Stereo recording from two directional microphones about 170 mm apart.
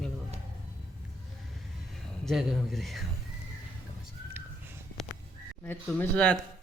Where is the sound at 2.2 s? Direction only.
Centre (ahead or behind).